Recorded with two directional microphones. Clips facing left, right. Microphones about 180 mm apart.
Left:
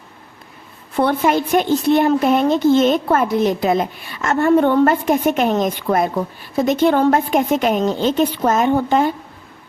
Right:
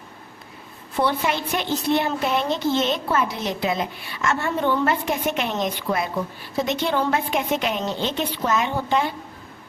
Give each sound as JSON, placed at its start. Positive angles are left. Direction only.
{"t": 0.9, "sound": "a woman's voice", "side_deg": 50}